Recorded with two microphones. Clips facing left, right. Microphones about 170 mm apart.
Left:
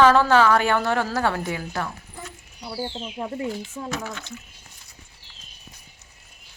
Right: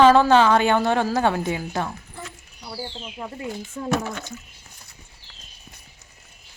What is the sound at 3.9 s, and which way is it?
Speech, 50° right (ahead or behind).